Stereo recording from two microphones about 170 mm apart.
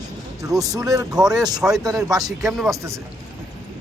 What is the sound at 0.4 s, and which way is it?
Speech, 20° right (ahead or behind).